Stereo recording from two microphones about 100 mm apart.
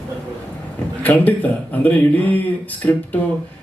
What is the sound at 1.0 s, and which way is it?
A man's voice, 15° left (ahead or behind).